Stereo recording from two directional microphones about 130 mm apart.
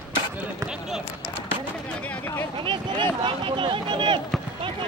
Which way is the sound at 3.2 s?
40° right (ahead or behind).